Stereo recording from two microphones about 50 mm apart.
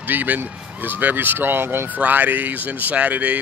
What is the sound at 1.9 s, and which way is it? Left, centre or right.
Speech, right.